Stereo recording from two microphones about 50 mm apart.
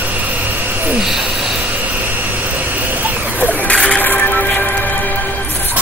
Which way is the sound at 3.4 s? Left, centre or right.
Left.